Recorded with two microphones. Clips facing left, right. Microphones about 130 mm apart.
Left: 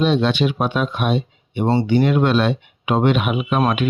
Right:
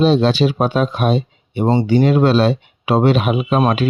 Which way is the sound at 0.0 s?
35° right (ahead or behind).